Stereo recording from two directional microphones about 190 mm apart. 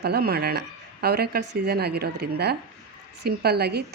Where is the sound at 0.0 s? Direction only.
55° right (ahead or behind).